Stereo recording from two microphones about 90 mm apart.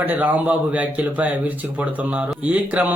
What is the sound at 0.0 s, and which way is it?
Speech, 20° right (ahead or behind).